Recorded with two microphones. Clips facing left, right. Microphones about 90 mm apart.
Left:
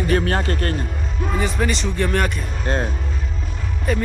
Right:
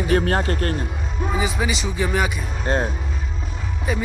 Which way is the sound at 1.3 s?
5° right (ahead or behind).